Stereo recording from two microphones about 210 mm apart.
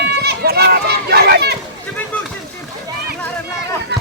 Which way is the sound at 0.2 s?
50° right (ahead or behind).